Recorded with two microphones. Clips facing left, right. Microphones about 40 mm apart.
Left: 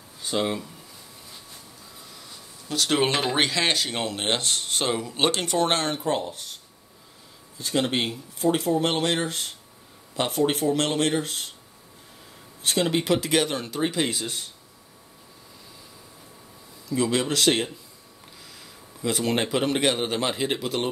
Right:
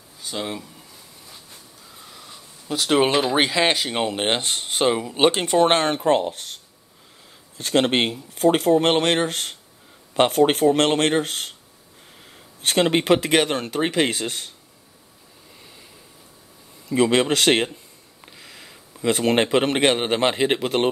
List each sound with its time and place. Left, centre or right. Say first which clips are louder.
0.2 s speech: left 3 dB; centre
2.7 s speech: right 4 dB; centre
3.4 s speech: right 4 dB; centre; by 6.5 s right
7.5 s speech: right 5 dB; right
12.6 s speech: right 5 dB; right
16.9 s a man's voice: right 6 dB; right